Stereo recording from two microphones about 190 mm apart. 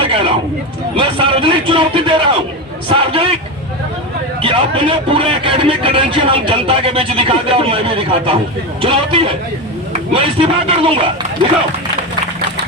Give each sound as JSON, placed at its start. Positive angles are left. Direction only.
{"t": 0.0, "sound": "a sound", "side_deg": -30}
{"t": 0.9, "sound": "a man's voice", "side_deg": -25}
{"t": 4.4, "sound": "a man's voice", "side_deg": -30}